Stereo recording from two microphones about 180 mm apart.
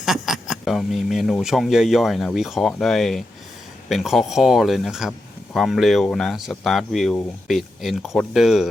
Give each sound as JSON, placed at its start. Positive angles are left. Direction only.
{"t": 0.0, "sound": "speech", "side_deg": 0}